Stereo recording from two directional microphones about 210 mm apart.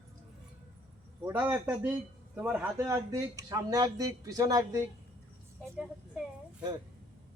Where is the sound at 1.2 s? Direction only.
5° right (ahead or behind).